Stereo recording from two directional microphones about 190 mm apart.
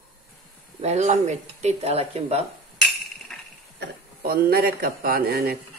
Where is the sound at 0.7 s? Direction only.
35° right (ahead or behind).